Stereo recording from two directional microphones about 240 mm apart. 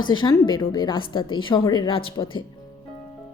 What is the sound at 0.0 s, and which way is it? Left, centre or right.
A woman's voice, centre.